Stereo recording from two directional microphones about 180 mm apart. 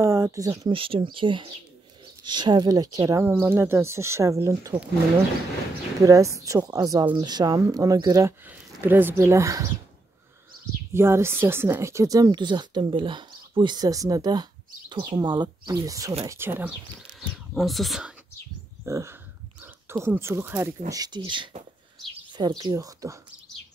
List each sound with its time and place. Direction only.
0.0 s speech: 15° right (ahead or behind)
5.9 s speech: 15° right (ahead or behind)
10.9 s speech: 15° right (ahead or behind)
17.2 s speech: centre (ahead or behind)
18.9 s speech: 15° right (ahead or behind)